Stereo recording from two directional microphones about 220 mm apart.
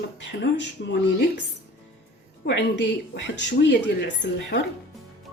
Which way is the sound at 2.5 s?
55° left (ahead or behind).